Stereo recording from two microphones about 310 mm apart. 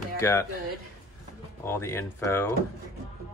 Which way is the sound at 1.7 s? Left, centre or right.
Centre.